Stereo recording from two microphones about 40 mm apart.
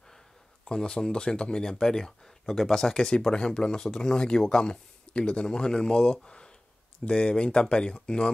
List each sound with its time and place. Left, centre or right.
0.7 s speech: left
6.2 s a sound: left
7.1 s speech: left